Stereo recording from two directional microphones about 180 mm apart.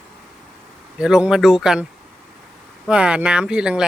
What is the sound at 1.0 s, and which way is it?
Speech, 5° right (ahead or behind).